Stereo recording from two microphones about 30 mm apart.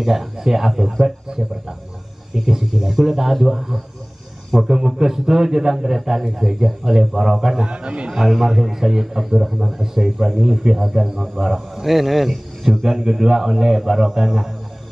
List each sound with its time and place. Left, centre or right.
0.0 s a man's voice: centre
7.6 s a man's voice: right
8.1 s a man's voice: centre
10.8 s a man's voice: centre
13.0 s a man's voice: centre